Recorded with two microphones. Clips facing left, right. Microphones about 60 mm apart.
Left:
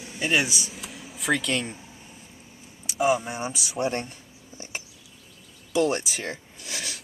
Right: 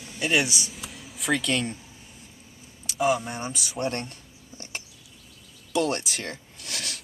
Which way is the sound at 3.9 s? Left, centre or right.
Centre.